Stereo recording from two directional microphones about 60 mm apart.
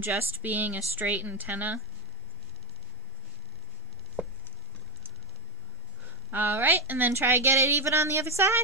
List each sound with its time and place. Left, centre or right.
0.0 s a woman's voice: right
6.0 s a sound: right
6.9 s a woman's voice: right